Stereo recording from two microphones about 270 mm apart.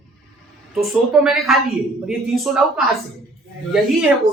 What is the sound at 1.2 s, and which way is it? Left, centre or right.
Speech, centre.